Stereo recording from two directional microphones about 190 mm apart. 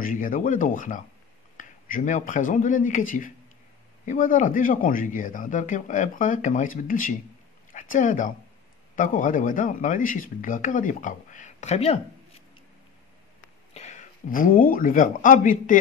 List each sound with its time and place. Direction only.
0.0 s speech: 45° left (ahead or behind)
13.7 s speech: 40° left (ahead or behind)